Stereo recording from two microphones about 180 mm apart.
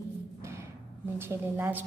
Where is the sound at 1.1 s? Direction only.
10° right (ahead or behind).